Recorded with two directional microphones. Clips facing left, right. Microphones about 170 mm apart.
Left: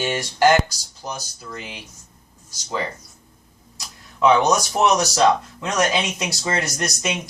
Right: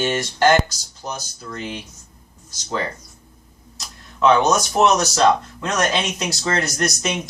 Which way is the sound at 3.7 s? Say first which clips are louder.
Even; 15° left (ahead or behind).